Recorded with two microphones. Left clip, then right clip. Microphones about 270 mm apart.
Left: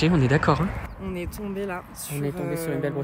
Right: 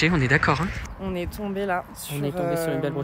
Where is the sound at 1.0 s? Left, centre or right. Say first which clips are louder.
Right 4 dB; right.